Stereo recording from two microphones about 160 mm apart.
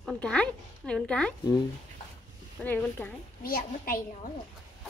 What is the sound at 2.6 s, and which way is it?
Speech, 10° left (ahead or behind).